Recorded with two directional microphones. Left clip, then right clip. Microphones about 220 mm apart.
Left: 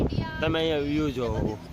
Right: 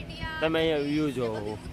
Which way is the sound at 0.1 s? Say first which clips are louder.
Left 2 dB; 45° right (ahead or behind).